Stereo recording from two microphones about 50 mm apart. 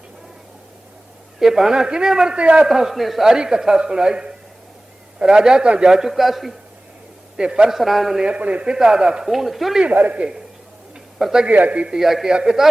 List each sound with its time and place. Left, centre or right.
1.4 s a man's voice: centre
2.3 s a man's voice: right
2.6 s a man's voice: centre
3.2 s a man's voice: centre
7.3 s a man's voice: centre
7.7 s a man's voice: centre
8.2 s a man's voice: right
8.7 s a man's voice: centre
9.3 s a man's voice: centre
9.9 s a man's voice: right
11.2 s a man's voice: centre
11.4 s a man's voice: right
11.9 s a man's voice: centre